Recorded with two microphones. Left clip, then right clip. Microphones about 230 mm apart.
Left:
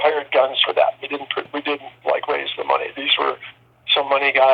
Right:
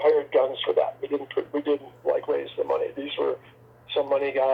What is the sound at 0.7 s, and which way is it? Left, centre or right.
Speech, left.